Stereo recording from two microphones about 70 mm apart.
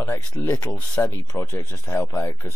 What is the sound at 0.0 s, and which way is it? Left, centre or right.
Speech, left.